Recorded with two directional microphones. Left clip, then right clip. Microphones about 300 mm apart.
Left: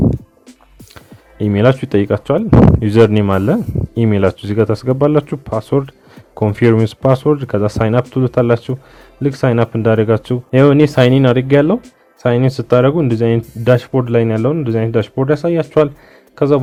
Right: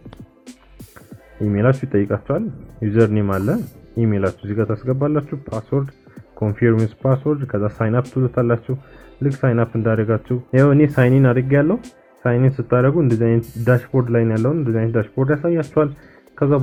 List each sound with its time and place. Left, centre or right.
1.5 s speech: left
13.4 s speech: centre
13.7 s speech: left